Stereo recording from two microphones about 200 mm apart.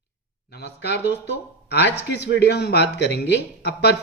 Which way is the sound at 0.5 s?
55° left (ahead or behind).